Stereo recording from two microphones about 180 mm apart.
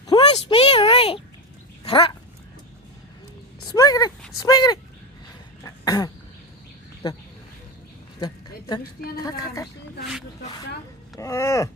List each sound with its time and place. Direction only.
0.1 s a sound: 30° left (ahead or behind)
1.8 s speech: 30° left (ahead or behind)
3.7 s speech: 20° left (ahead or behind)
5.6 s cough: 20° left (ahead or behind)
9.1 s speech: 20° left (ahead or behind)
11.2 s a sound: 15° left (ahead or behind)